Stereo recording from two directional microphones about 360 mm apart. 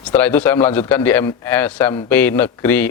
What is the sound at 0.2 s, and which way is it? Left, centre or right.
A man's voice, centre.